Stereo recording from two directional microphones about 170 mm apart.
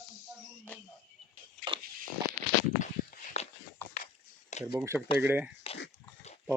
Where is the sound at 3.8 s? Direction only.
10° left (ahead or behind).